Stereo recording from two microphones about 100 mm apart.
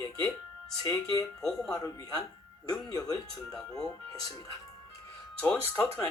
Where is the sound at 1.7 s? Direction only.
35° left (ahead or behind).